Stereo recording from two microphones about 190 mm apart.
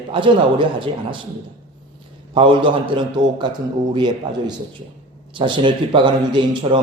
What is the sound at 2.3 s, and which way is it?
A man's voice, 25° right (ahead or behind).